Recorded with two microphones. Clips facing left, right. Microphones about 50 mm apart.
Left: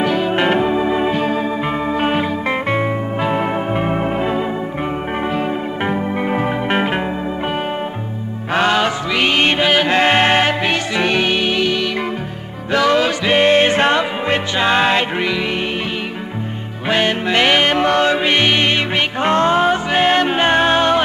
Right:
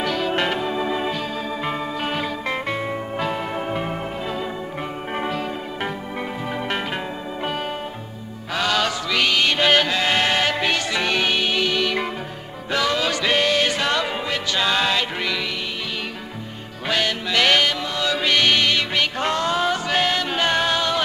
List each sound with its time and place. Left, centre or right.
0.0 s music: centre
0.5 s organ: left
2.0 s music: left
3.2 s organ: left
6.3 s organ: left
8.5 s music: left
9.6 s music: centre
9.8 s music: left
12.7 s music: left
13.2 s music: left
16.9 s music: left
17.6 s music: left
18.1 s music: left